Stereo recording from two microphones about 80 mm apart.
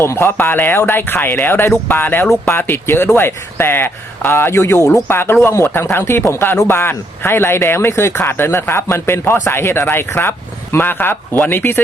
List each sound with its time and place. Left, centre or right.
0.0 s a man's voice: left